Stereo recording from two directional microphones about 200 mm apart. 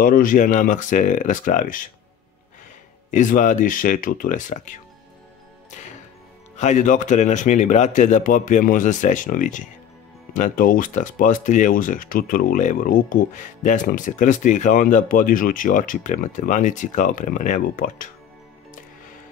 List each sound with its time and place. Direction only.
0.0 s speech: 45° left (ahead or behind)
3.1 s speech: 40° left (ahead or behind)
6.5 s speech: 35° left (ahead or behind)